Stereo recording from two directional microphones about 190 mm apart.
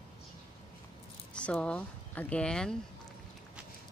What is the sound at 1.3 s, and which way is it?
Speech, 5° left (ahead or behind).